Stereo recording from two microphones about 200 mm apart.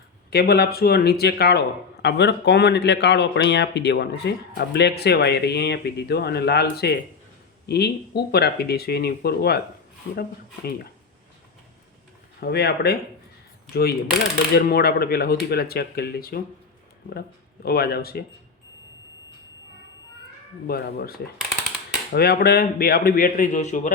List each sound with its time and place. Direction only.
0.3 s speech: 50° left (ahead or behind)
12.4 s speech: 55° left (ahead or behind)
14.5 s speech: 50° left (ahead or behind)
20.7 s speech: 50° left (ahead or behind)